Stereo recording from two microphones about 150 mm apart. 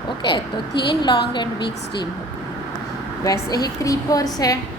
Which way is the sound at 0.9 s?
30° left (ahead or behind).